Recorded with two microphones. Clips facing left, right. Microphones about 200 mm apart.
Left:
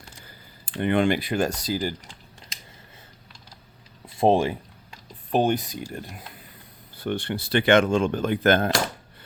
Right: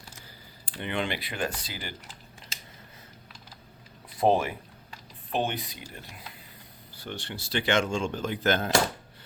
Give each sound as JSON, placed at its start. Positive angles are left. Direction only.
{"t": 0.8, "sound": "speech", "side_deg": 50}
{"t": 4.2, "sound": "speech", "side_deg": 25}
{"t": 5.3, "sound": "speech", "side_deg": 45}